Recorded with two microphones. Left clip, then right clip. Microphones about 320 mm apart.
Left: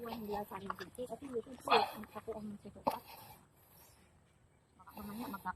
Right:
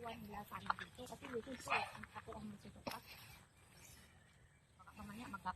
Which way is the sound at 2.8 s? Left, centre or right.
Centre.